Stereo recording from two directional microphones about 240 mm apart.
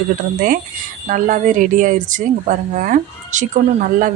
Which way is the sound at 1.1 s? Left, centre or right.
Right.